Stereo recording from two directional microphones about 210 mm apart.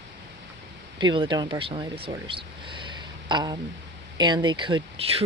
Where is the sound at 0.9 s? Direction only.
20° right (ahead or behind).